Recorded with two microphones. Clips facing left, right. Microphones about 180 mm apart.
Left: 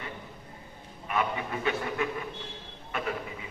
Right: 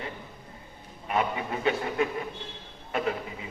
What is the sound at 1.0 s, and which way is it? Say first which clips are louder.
A man's voice: right 2 dB; 35° right (ahead or behind).